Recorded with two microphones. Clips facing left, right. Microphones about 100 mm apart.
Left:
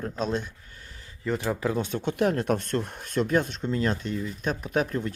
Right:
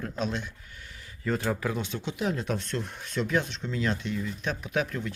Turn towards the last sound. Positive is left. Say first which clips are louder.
# left 3 dB
turn(degrees=40)  # may be behind; listen again after turning